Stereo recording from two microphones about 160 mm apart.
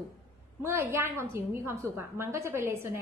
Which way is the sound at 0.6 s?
15° right (ahead or behind).